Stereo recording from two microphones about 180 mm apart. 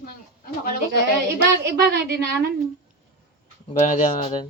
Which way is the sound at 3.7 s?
45° left (ahead or behind).